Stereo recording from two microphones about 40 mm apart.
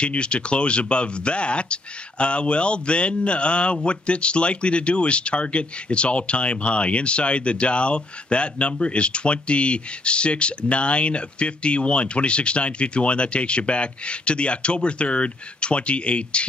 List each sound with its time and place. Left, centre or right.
0.0 s speech: left